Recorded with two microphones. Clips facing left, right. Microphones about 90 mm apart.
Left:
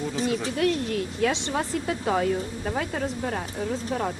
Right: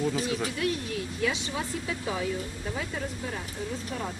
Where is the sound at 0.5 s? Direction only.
55° left (ahead or behind).